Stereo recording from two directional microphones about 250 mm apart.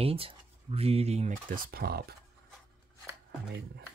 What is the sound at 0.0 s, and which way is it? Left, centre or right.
Speech, right.